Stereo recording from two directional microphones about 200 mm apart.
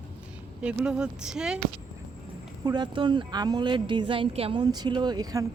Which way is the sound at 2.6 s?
20° right (ahead or behind).